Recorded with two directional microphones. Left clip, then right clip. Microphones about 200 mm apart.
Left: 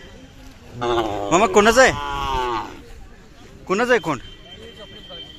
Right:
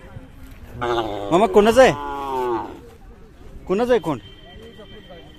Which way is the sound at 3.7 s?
20° right (ahead or behind).